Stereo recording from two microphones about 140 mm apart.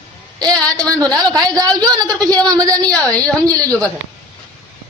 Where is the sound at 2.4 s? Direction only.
25° right (ahead or behind).